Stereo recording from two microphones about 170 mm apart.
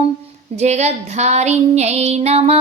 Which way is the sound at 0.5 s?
40° right (ahead or behind).